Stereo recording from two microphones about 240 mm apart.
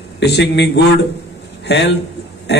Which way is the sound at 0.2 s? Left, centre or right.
Left.